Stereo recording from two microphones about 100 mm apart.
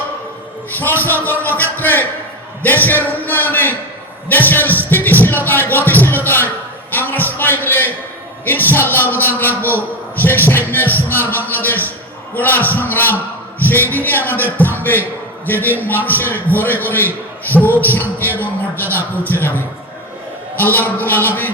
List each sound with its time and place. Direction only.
0.8 s music: 20° left (ahead or behind)
2.6 s a man's voice: 20° left (ahead or behind)
4.3 s music: 20° left (ahead or behind)
6.2 s a sound: 20° left (ahead or behind)
8.4 s a man's voice: 20° left (ahead or behind)
17.7 s music: 20° left (ahead or behind)
19.2 s speech: 20° left (ahead or behind)